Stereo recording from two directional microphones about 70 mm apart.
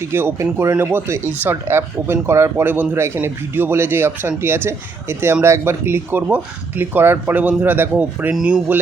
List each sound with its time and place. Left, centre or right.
0.0 s speech: right
8.3 s speech: centre